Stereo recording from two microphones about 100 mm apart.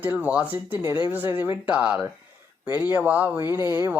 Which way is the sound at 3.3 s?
25° right (ahead or behind).